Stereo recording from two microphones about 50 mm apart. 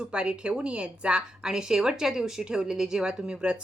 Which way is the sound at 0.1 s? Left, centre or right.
Centre.